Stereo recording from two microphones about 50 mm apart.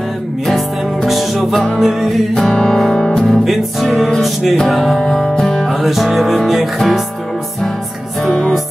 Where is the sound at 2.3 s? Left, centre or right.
Centre.